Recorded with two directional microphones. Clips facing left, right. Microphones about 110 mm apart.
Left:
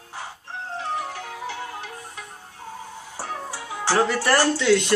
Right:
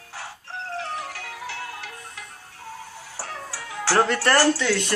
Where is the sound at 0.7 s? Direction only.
15° left (ahead or behind).